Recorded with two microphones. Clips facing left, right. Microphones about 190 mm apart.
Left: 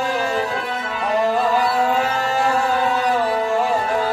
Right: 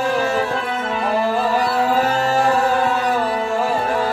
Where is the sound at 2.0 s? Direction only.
35° right (ahead or behind).